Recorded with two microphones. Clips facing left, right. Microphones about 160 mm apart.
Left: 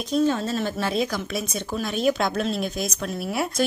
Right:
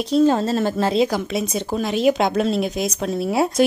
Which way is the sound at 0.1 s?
35° right (ahead or behind).